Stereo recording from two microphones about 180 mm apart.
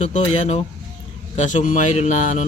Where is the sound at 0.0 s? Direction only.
40° left (ahead or behind).